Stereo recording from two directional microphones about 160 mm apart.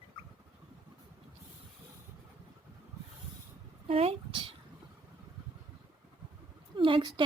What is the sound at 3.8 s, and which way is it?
Speech, 40° right (ahead or behind).